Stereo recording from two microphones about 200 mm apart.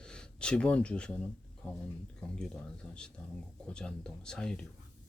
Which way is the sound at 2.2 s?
5° left (ahead or behind).